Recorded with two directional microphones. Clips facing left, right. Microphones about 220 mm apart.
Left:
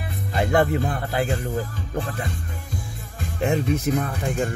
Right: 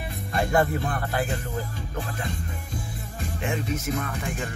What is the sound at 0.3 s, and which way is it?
Speech, 25° left (ahead or behind).